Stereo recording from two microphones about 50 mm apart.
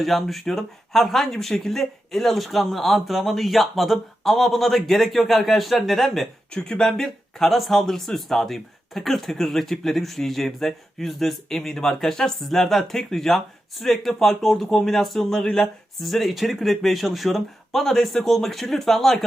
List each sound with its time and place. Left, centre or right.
0.0 s speech: centre
6.5 s speech: centre
6.9 s speech: centre
15.6 s speech: centre